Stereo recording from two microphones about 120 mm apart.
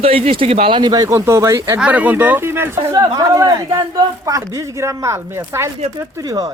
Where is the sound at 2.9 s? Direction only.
30° right (ahead or behind).